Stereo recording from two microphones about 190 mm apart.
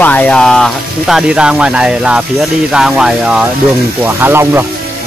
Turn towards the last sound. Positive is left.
turn(degrees=-10)  # may be behind; listen again after turning